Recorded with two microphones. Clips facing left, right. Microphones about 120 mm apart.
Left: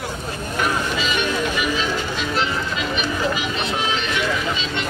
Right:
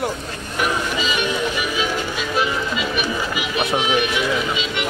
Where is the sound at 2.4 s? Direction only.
10° right (ahead or behind).